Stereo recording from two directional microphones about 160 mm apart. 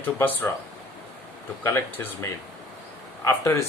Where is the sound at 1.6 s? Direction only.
15° left (ahead or behind).